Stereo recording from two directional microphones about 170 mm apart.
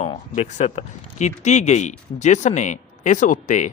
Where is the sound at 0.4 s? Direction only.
45° left (ahead or behind).